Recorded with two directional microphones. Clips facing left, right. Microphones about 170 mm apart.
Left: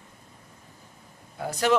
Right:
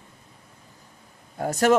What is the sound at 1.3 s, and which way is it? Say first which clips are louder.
Vehicle: right 5 dB; 45° right (ahead or behind).